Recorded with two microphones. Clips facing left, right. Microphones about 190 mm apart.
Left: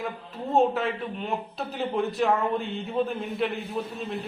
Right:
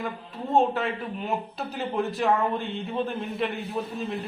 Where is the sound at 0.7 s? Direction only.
Centre (ahead or behind).